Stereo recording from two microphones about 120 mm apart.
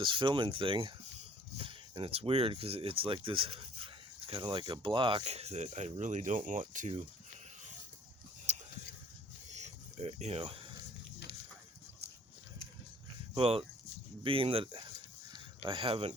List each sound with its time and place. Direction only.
0.0 s speech: 45° right (ahead or behind)
5.2 s speech: 65° right (ahead or behind); by 7.0 s 85° right
8.5 s a sound: 70° right (ahead or behind)
10.4 s speech: 45° right (ahead or behind)
13.3 s speech: 55° right (ahead or behind)
15.3 s a sound: 45° right (ahead or behind)